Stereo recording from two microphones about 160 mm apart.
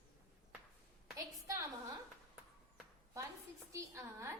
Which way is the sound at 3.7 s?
20° right (ahead or behind).